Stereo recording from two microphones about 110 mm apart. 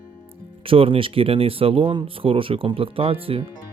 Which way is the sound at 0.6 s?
55° right (ahead or behind).